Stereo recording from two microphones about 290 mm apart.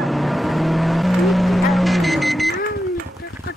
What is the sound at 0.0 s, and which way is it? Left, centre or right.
Vehicle, centre.